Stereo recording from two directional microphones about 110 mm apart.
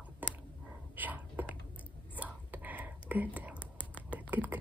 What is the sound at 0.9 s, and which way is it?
Whispering, 15° right (ahead or behind).